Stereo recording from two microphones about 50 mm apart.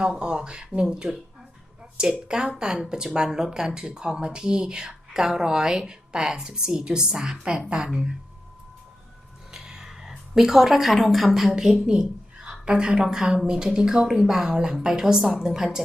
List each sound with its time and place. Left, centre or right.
0.2 s a woman's voice: centre
9.5 s a sound: centre
11.3 s a woman's voice: centre